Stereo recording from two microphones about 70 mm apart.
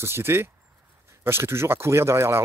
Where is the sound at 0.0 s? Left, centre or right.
Right.